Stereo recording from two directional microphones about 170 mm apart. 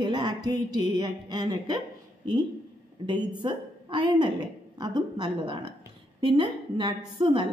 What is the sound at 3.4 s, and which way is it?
A woman's voice, 25° right (ahead or behind).